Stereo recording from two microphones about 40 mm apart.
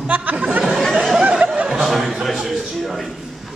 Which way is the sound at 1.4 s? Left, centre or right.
Right.